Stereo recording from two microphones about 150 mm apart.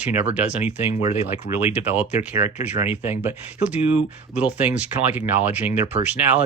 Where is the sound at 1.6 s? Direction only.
10° right (ahead or behind).